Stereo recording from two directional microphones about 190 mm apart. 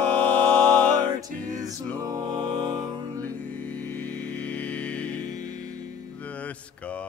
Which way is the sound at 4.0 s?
10° left (ahead or behind).